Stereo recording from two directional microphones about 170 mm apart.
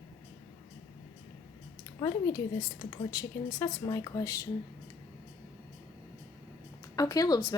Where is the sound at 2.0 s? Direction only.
20° left (ahead or behind).